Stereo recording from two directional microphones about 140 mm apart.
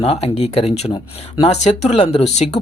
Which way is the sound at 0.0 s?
45° left (ahead or behind).